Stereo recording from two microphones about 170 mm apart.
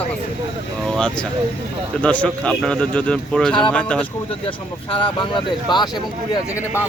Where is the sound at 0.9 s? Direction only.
5° left (ahead or behind).